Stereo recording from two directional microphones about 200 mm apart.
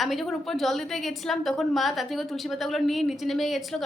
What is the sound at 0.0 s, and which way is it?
A woman's voice, centre (ahead or behind).